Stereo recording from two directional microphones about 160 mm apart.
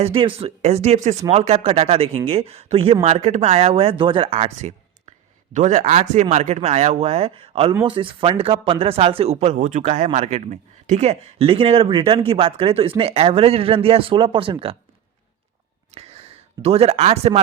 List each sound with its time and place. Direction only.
0.0 s speech: 35° right (ahead or behind)
9.6 s speech: 55° right (ahead or behind); by 14.8 s 35° right (ahead or behind)
15.9 s a sound: 40° right (ahead or behind)